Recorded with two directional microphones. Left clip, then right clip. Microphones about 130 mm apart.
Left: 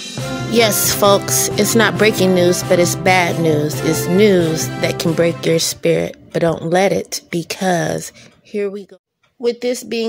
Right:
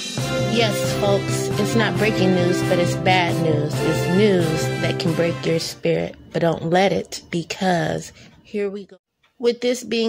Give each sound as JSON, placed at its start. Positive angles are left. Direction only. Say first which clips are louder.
{"t": 0.0, "sound": "music", "louder": "right 1 dB", "side_deg": 0}
{"t": 0.5, "sound": "music", "louder": "left 8 dB", "side_deg": 60}
{"t": 4.2, "sound": "speech", "louder": "left 6 dB", "side_deg": 40}
{"t": 9.4, "sound": "speech", "louder": "left 1 dB", "side_deg": 10}